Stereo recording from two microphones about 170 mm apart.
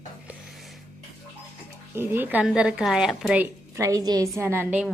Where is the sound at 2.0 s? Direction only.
10° right (ahead or behind).